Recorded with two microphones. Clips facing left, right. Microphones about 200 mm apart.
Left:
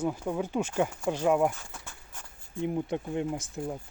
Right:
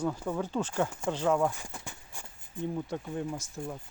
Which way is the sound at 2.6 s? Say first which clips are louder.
Left 4 dB; 20° left (ahead or behind).